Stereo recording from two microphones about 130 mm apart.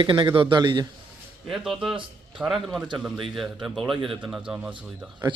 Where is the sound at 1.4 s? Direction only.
Centre (ahead or behind).